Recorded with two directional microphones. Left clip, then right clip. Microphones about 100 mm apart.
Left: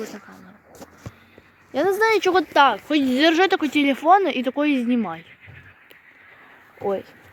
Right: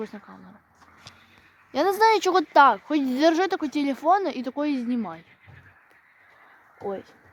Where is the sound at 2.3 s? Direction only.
20° right (ahead or behind).